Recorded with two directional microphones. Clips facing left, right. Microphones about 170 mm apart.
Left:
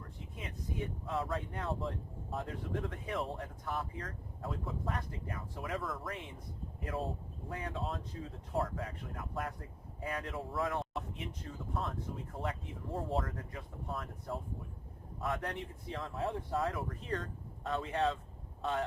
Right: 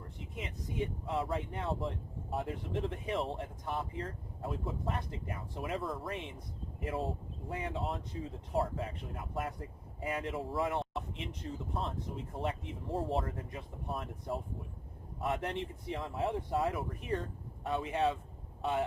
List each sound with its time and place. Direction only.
0.3 s speech: 20° right (ahead or behind)
15.4 s speech: 20° right (ahead or behind)